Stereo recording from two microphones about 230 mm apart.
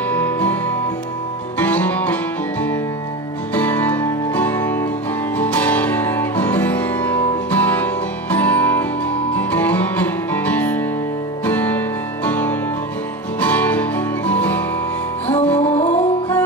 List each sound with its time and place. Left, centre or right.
0.1 s music: centre
3.5 s music: centre
15.7 s music: left
16.0 s music: centre